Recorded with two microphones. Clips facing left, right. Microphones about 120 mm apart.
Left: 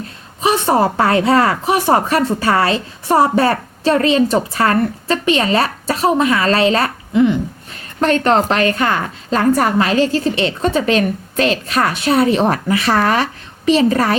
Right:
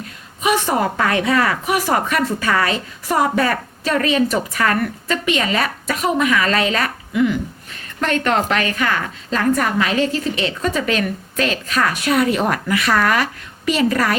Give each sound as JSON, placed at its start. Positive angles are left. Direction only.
{"t": 0.4, "sound": "a woman's voice", "side_deg": 30}